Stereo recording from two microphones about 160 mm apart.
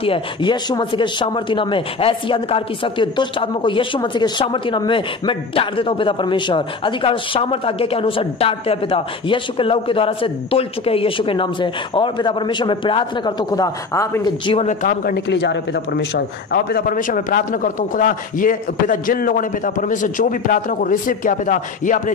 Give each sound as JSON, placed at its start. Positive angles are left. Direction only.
{"t": 0.0, "sound": "speech", "side_deg": 30}
{"t": 14.4, "sound": "speech", "side_deg": 35}
{"t": 14.7, "sound": "a man's voice", "side_deg": 55}
{"t": 16.5, "sound": "a man's voice", "side_deg": 75}